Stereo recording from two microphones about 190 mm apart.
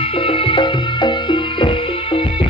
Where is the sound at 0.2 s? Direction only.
25° left (ahead or behind).